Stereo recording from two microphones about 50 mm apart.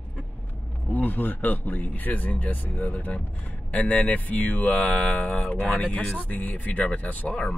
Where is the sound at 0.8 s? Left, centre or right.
Left.